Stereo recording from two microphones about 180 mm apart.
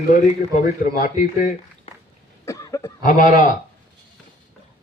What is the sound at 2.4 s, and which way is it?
Cough, 15° left (ahead or behind).